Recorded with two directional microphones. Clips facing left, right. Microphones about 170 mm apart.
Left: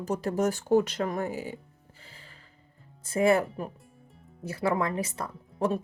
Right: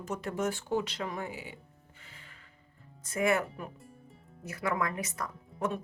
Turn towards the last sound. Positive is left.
turn(degrees=30)  # may be behind; listen again after turning